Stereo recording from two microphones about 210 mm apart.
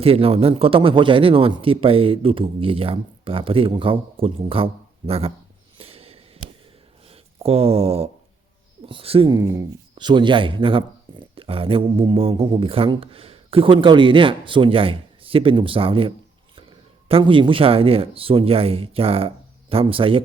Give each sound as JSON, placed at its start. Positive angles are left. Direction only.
{"t": 0.0, "sound": "speech", "side_deg": -30}
{"t": 5.7, "sound": "a sound", "side_deg": -25}
{"t": 7.1, "sound": "speech", "side_deg": -30}
{"t": 9.4, "sound": "speech", "side_deg": -15}